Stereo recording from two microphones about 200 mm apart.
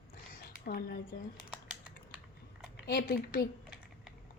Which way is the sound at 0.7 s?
50° left (ahead or behind).